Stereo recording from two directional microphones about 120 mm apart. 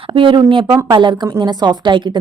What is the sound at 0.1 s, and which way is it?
A woman's voice, 45° right (ahead or behind).